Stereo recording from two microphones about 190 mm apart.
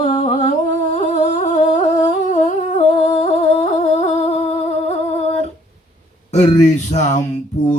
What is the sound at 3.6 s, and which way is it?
Music, 35° left (ahead or behind).